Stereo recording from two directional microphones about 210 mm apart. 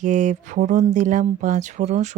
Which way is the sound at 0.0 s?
35° right (ahead or behind).